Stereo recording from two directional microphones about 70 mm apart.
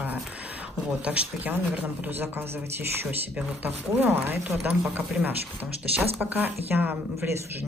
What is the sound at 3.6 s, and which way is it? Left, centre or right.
Speech, right.